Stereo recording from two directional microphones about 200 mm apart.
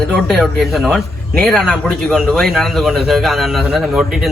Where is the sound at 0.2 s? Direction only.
Centre (ahead or behind).